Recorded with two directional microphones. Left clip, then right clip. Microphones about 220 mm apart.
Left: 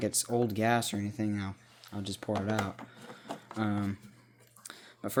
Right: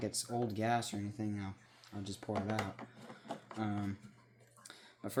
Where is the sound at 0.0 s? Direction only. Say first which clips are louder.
Left 8 dB; 40° left (ahead or behind).